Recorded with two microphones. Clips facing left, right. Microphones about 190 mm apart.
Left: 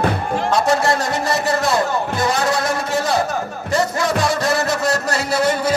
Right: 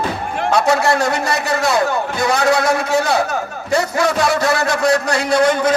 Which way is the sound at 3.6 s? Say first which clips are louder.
Right 2 dB; centre (ahead or behind).